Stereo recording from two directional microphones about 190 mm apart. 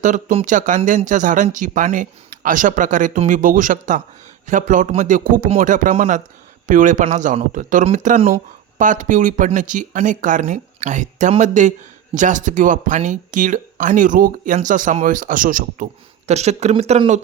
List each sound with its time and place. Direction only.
0.0 s speech: 40° right (ahead or behind)